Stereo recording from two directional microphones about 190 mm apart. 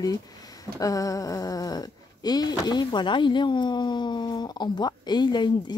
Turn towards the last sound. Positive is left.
turn(degrees=25)  # may be behind; listen again after turning